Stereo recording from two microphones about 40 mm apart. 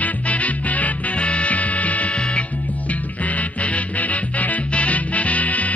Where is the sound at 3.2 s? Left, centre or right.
Left.